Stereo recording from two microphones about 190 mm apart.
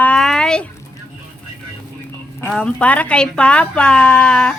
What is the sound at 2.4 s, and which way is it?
Speech, 5° left (ahead or behind).